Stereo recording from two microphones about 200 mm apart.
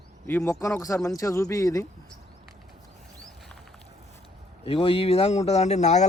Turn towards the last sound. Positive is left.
turn(degrees=35)  # may be behind; listen again after turning